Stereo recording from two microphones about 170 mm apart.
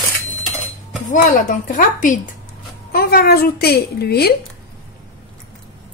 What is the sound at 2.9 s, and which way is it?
A woman's voice, 65° left (ahead or behind).